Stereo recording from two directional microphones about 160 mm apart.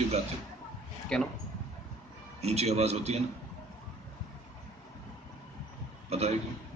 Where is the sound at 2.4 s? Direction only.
40° right (ahead or behind).